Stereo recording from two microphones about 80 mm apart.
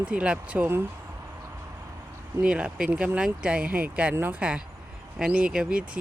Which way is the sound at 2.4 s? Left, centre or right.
Centre.